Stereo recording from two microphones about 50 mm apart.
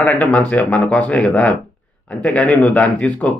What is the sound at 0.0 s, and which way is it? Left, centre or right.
Speech, left.